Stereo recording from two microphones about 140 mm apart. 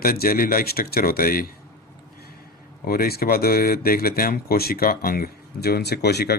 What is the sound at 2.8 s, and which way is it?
Speech, 90° left.